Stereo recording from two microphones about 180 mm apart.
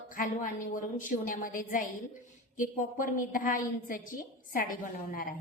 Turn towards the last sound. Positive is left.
turn(degrees=50)  # may be behind; listen again after turning